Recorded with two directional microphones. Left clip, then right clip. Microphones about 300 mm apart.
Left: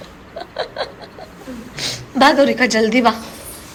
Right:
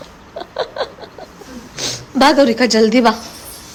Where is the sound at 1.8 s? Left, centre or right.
Centre.